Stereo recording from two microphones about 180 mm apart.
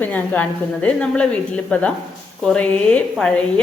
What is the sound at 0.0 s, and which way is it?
A woman's voice, 10° left (ahead or behind).